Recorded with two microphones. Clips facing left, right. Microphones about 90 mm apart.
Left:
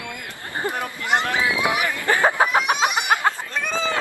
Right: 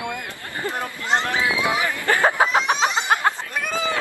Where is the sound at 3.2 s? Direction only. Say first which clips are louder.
Even; 15° right (ahead or behind).